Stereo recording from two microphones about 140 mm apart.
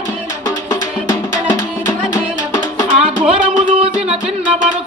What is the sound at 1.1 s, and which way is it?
Music, 25° left (ahead or behind).